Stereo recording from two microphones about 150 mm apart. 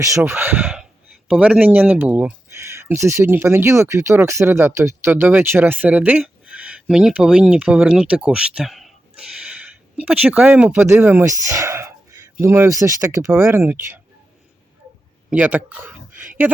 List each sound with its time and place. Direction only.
0.0 s speech: 15° right (ahead or behind); by 8.9 s centre (ahead or behind)
10.0 s speech: 10° right (ahead or behind)
15.3 s speech: 10° right (ahead or behind)